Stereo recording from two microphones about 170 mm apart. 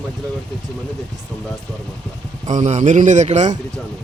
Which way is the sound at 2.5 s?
45° right (ahead or behind).